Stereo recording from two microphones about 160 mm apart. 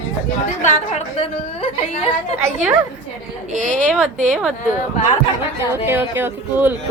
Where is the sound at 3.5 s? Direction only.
50° right (ahead or behind).